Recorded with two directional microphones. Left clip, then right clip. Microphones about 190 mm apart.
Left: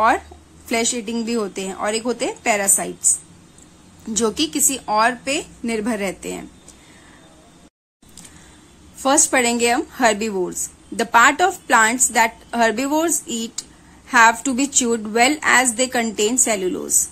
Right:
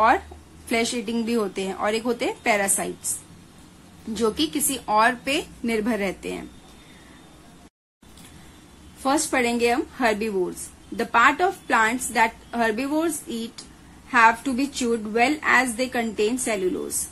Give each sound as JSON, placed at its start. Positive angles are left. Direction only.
{"t": 0.7, "sound": "a woman's voice", "side_deg": 15}
{"t": 4.1, "sound": "a woman's voice", "side_deg": 20}
{"t": 9.0, "sound": "a woman's voice", "side_deg": 25}